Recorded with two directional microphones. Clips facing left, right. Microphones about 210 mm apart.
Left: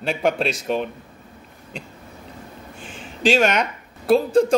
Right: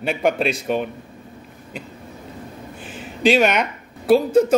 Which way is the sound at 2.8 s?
5° right (ahead or behind).